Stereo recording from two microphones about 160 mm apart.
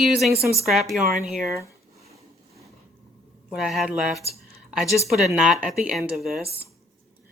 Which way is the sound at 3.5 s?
Centre (ahead or behind).